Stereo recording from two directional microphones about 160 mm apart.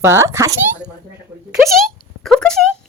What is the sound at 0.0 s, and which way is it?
Speech, 15° right (ahead or behind).